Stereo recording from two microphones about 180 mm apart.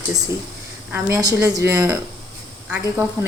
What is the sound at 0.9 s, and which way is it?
A woman's voice, 10° right (ahead or behind).